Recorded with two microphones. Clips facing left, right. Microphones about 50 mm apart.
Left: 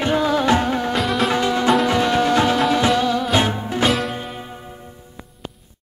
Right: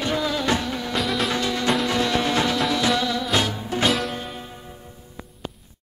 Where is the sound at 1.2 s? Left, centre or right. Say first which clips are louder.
Left 5 dB; left.